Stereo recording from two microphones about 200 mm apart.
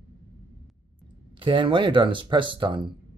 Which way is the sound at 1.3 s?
25° right (ahead or behind).